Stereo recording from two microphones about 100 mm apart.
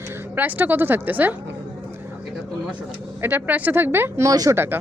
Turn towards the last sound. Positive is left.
turn(degrees=-25)  # may be behind; listen again after turning